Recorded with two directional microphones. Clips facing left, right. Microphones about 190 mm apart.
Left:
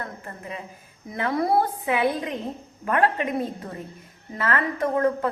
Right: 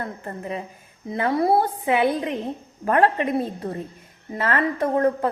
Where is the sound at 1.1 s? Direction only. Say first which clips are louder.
Right 3 dB; 30° right (ahead or behind).